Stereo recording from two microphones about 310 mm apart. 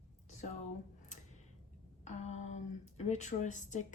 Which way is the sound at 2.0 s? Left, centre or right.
Left.